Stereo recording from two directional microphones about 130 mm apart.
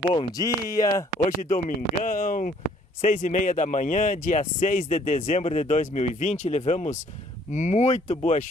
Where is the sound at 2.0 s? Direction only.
90° left; by 8.5 s 65° left (ahead or behind).